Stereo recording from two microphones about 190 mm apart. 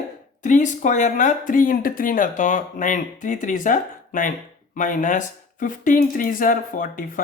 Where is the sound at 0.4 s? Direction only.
40° left (ahead or behind).